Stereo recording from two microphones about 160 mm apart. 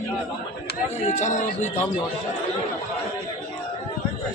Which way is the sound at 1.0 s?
50° left (ahead or behind).